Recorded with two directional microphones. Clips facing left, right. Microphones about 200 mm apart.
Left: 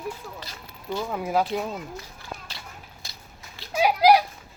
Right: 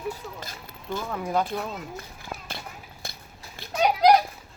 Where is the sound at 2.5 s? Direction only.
55° right (ahead or behind).